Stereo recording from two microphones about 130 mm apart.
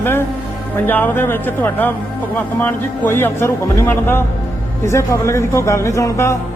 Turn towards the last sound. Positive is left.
turn(degrees=20)  # may be behind; listen again after turning